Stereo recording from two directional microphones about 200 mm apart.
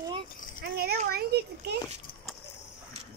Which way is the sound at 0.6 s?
50° right (ahead or behind).